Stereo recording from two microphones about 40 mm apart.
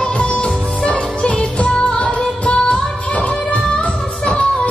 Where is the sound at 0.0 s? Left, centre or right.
Left.